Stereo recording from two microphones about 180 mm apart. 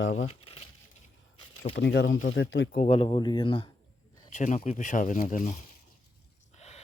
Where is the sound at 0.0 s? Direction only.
90° left.